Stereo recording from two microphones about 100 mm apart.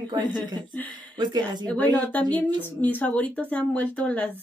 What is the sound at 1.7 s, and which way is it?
Speech, 15° left (ahead or behind).